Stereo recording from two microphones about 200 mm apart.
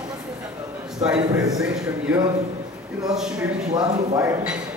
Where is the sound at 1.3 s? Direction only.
20° right (ahead or behind).